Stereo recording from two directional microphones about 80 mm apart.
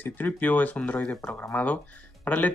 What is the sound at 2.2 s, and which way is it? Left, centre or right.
Speech, left.